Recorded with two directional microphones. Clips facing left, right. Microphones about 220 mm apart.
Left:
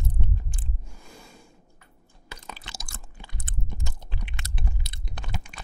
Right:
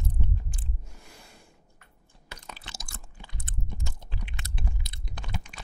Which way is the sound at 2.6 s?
90° left.